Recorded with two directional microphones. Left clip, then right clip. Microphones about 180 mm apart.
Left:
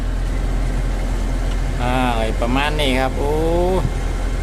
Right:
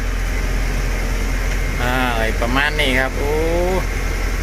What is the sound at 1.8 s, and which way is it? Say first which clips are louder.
Vehicle: even; 15° left (ahead or behind).